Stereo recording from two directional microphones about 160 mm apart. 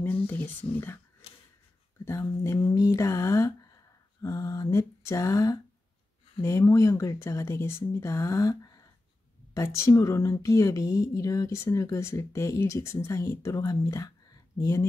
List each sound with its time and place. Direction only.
0.0 s speech: 10° left (ahead or behind)
2.0 s a woman's voice: 20° left (ahead or behind)